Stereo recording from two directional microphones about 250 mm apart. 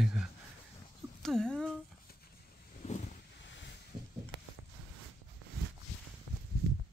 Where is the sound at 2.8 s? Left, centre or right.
Left.